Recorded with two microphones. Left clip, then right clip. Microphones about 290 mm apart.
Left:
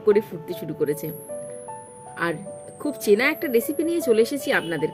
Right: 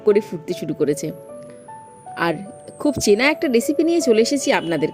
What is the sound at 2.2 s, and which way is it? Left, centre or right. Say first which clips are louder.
A woman's voice: right 5 dB; right.